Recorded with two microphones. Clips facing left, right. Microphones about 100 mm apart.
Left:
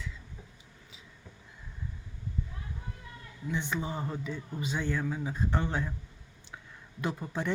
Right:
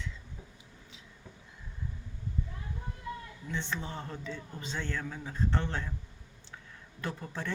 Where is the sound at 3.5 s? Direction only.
10° left (ahead or behind).